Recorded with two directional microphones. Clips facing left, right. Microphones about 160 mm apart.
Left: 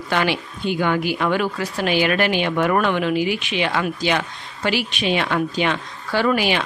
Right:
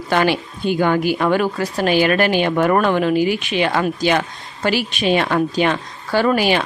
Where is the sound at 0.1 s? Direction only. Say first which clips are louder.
Right 4 dB; 45° right (ahead or behind).